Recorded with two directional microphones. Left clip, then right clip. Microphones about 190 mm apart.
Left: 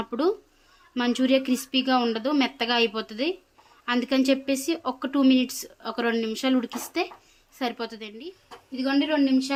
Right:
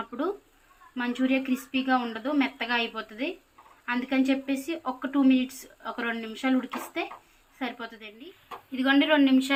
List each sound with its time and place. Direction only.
0.1 s speech: 65° left (ahead or behind)
8.7 s speech: 35° left (ahead or behind)